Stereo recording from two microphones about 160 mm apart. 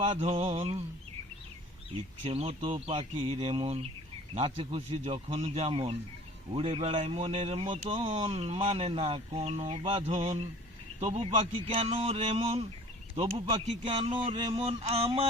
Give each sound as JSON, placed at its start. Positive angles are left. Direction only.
{"t": 0.0, "sound": "speech", "side_deg": -40}
{"t": 2.2, "sound": "speech", "side_deg": -40}